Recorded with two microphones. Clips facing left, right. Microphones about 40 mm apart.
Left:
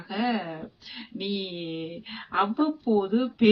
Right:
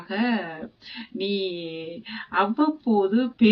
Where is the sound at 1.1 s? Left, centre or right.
Right.